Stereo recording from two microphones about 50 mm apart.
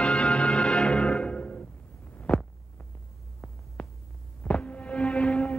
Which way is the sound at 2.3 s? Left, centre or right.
Left.